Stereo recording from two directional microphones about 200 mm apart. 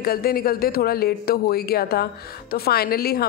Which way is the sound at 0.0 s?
50° left (ahead or behind).